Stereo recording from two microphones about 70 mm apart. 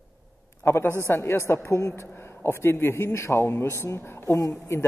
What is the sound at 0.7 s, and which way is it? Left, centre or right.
A woman's voice, left.